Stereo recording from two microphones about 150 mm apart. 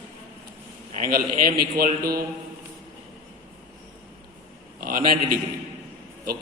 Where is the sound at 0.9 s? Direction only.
75° right (ahead or behind).